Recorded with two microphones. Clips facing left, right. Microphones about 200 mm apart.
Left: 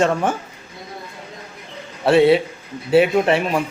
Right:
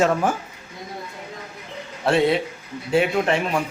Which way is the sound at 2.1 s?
5° left (ahead or behind).